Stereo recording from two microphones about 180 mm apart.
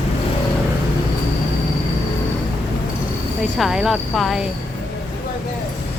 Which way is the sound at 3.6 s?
Centre (ahead or behind).